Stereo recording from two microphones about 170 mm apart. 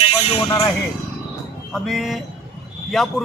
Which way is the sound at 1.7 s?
Centre (ahead or behind).